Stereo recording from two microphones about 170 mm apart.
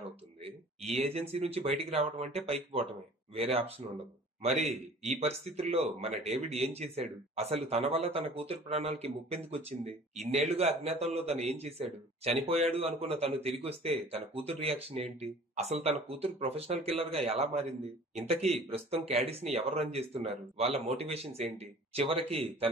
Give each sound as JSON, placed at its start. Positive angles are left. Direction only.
{"t": 0.9, "sound": "speech", "side_deg": -35}